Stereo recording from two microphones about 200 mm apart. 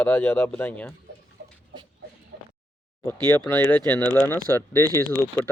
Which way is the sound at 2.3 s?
60° right (ahead or behind).